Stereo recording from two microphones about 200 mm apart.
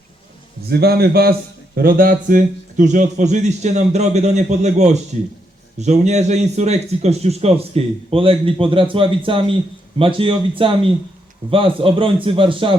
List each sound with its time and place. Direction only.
0.7 s a man's voice: 50° right (ahead or behind); by 12.7 s 25° right (ahead or behind)